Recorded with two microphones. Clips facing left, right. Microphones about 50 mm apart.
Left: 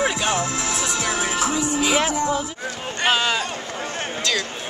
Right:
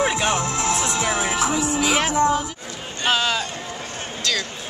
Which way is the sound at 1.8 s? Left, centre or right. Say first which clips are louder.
Right 2 dB; right.